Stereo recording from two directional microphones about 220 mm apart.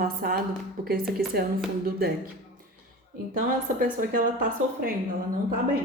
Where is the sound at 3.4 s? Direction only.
40° right (ahead or behind).